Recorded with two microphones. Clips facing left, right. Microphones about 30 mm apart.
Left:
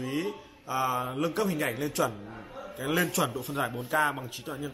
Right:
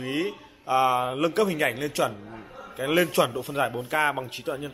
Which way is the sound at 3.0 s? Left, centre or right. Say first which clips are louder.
Right 6 dB; right.